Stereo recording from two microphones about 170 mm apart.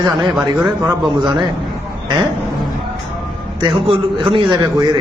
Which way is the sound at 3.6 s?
30° right (ahead or behind).